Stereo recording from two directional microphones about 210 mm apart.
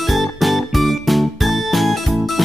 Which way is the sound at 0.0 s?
Centre (ahead or behind).